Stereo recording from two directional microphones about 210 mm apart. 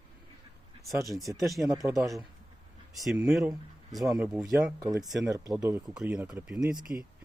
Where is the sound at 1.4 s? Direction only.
Centre (ahead or behind).